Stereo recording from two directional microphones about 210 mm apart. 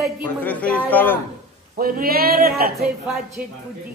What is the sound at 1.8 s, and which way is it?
Speech, 45° right (ahead or behind).